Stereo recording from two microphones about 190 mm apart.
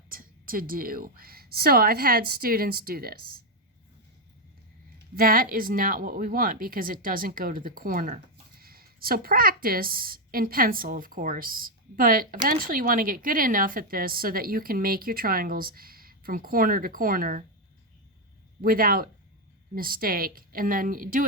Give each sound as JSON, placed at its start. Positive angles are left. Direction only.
{"t": 0.1, "sound": "a woman's voice", "side_deg": -50}
{"t": 4.9, "sound": "a woman's voice", "side_deg": -50}
{"t": 18.6, "sound": "a woman's voice", "side_deg": -50}